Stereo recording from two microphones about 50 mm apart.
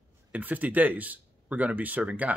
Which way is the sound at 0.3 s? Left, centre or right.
Right.